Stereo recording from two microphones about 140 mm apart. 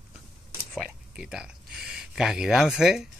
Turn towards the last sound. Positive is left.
turn(degrees=-5)  # may be behind; listen again after turning